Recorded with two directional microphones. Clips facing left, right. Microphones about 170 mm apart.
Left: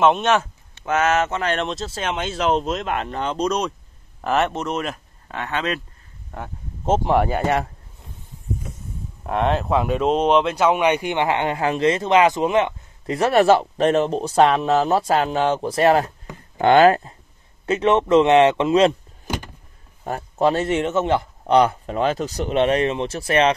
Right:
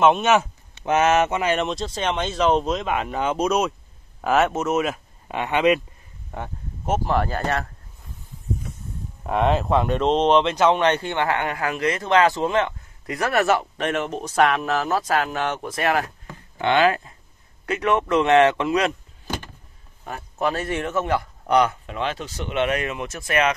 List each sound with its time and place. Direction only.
0.0 s speech: 5° right (ahead or behind)
5.3 s speech: 15° right (ahead or behind)
6.3 s speech: centre (ahead or behind)
7.1 s speech: 10° left (ahead or behind)
9.2 s speech: centre (ahead or behind); by 16.1 s 30° left (ahead or behind)
16.5 s a man's voice: 40° left (ahead or behind)
17.6 s a man's voice: 25° left (ahead or behind)